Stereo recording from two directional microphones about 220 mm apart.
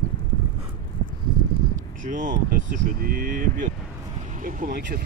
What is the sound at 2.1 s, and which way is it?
Speech, 35° right (ahead or behind).